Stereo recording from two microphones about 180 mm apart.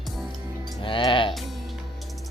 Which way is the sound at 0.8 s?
30° left (ahead or behind).